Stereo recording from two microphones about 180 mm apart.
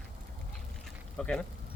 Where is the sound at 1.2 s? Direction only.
5° left (ahead or behind).